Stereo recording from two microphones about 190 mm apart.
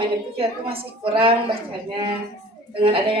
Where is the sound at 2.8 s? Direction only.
30° right (ahead or behind).